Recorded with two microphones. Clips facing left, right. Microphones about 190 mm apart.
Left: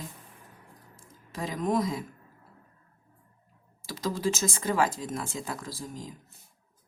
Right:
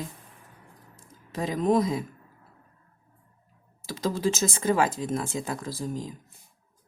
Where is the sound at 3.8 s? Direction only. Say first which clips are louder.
Right 3 dB; 25° right (ahead or behind).